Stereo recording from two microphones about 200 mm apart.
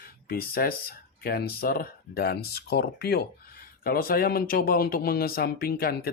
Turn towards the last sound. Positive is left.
turn(degrees=50)  # may be behind; listen again after turning